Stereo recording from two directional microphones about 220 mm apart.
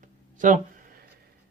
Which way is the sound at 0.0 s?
35° right (ahead or behind).